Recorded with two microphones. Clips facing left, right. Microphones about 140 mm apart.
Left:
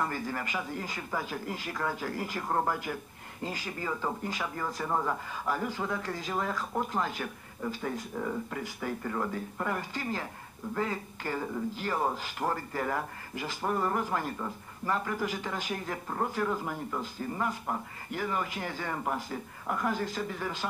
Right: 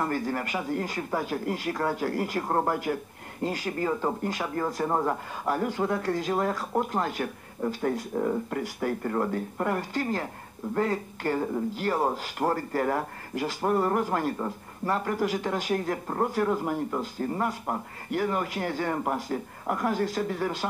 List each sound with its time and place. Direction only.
0.0 s speech: 45° right (ahead or behind)
2.8 s speech: 50° right (ahead or behind)
8.2 s speech: 35° right (ahead or behind)
8.5 s speech: 50° right (ahead or behind)